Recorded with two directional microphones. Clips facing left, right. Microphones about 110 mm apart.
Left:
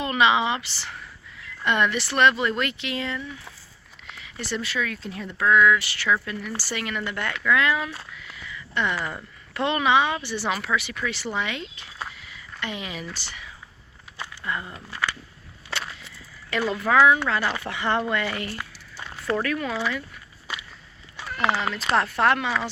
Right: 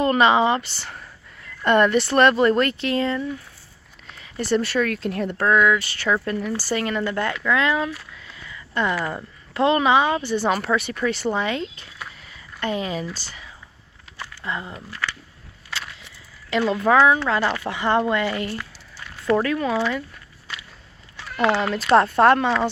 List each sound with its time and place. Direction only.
0.0 s speech: 40° right (ahead or behind)
4.9 s speech: 60° right (ahead or behind)
5.5 s speech: 20° right (ahead or behind)
6.1 s speech: 35° right (ahead or behind)
8.1 s a sound: 30° right (ahead or behind)
9.0 s speech: 30° right (ahead or behind)
12.1 s a sound: 40° right (ahead or behind)
14.4 s speech: 25° right (ahead or behind)
14.8 s speech: 20° left (ahead or behind)
16.5 s speech: 20° right (ahead or behind)
18.5 s a sound: 20° left (ahead or behind)
19.4 s speech: 25° right (ahead or behind)
21.2 s cat: 15° left (ahead or behind)
21.5 s speech: 40° right (ahead or behind)